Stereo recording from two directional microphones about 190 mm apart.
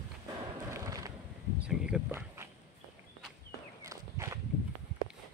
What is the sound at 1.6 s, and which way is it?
Speech, 5° right (ahead or behind).